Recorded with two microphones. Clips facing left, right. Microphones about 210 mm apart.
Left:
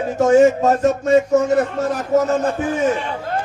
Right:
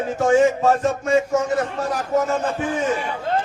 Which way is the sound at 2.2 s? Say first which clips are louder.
Left 4 dB; 45° left (ahead or behind).